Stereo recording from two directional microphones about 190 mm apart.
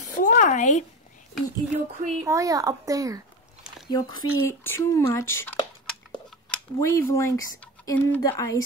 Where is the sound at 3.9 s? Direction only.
20° left (ahead or behind).